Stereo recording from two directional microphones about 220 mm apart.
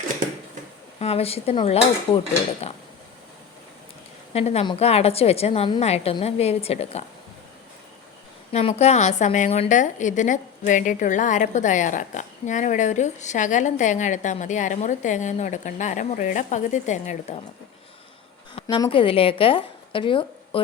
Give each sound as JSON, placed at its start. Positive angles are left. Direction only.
{"t": 0.9, "sound": "a woman's voice", "side_deg": 25}
{"t": 4.4, "sound": "a woman's voice", "side_deg": 30}
{"t": 8.5, "sound": "a woman's voice", "side_deg": 30}
{"t": 18.5, "sound": "a woman's voice", "side_deg": 25}